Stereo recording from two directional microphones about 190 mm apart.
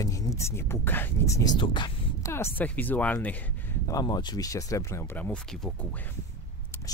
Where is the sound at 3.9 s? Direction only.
20° left (ahead or behind).